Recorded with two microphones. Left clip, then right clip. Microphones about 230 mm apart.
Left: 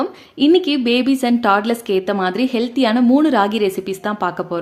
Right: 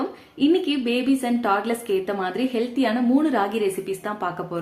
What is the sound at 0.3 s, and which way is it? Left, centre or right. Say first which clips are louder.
A woman's voice: left 7 dB; left.